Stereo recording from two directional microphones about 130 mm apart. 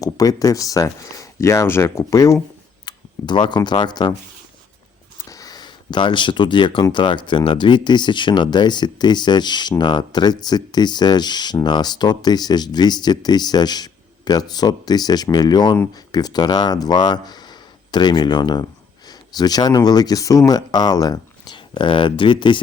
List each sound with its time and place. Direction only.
0.0 s speech: 25° left (ahead or behind)
2.8 s speech: 35° left (ahead or behind)
5.3 s speech: 30° left (ahead or behind)